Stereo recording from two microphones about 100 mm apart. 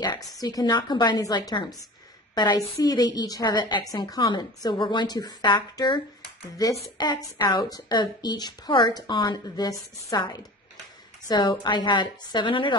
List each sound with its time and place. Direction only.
0.0 s a woman's voice: 40° left (ahead or behind)
6.6 s a woman's voice: 30° left (ahead or behind); by 12.7 s 55° left (ahead or behind)